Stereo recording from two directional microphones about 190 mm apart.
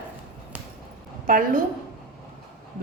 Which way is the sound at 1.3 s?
45° right (ahead or behind).